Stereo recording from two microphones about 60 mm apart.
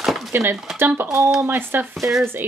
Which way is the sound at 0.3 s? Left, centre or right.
Right.